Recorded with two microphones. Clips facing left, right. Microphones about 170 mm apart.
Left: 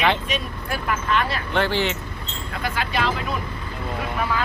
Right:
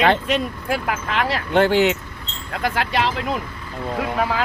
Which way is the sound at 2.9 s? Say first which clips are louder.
Right 2 dB; 80° right.